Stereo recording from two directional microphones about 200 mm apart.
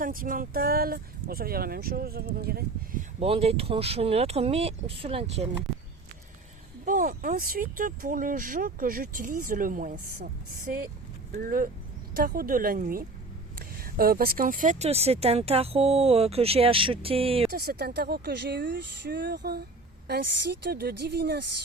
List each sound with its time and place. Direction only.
0.0 s speech: 45° right (ahead or behind)
3.2 s speech: 30° right (ahead or behind)
6.8 s speech: 40° right (ahead or behind)
17.5 s speech: 50° right (ahead or behind)